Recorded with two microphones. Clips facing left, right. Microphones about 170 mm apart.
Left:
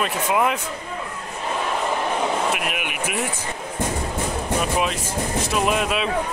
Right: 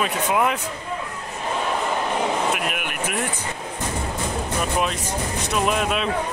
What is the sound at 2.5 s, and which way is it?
Air conditioning, centre (ahead or behind).